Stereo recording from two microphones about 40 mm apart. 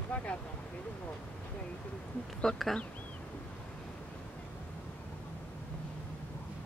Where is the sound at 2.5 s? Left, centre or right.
Centre.